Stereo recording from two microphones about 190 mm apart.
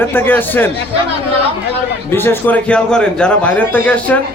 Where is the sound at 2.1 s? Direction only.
10° left (ahead or behind).